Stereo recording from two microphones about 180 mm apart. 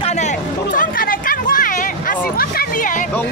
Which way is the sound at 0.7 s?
50° left (ahead or behind).